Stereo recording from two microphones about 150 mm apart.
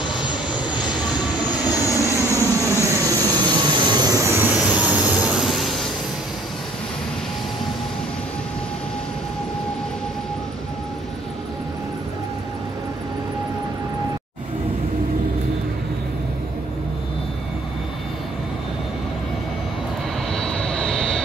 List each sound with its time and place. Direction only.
0.2 s vehicle: 5° right (ahead or behind)
1.7 s vehicle: 20° left (ahead or behind)
2.3 s vehicle: 20° right (ahead or behind); by 5.9 s centre (ahead or behind)
20.3 s vehicle: 5° left (ahead or behind)